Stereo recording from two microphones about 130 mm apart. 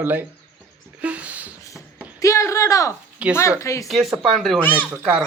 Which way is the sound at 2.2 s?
25° left (ahead or behind).